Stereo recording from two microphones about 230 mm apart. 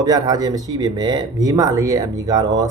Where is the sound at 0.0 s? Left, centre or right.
Centre.